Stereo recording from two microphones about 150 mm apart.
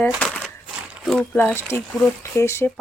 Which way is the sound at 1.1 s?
10° left (ahead or behind).